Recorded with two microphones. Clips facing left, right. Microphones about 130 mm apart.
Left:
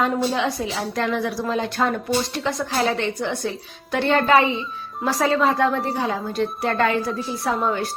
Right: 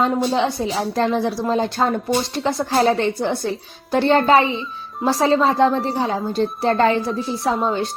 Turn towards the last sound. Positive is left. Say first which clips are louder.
# right 2 dB
turn(degrees=-25)  # may be behind; listen again after turning